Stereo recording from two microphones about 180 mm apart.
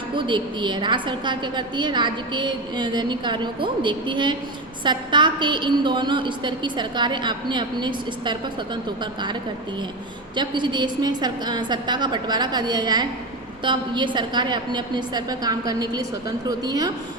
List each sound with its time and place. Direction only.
0.2 s a woman's voice: 25° right (ahead or behind)
10.3 s a woman's voice: 25° right (ahead or behind)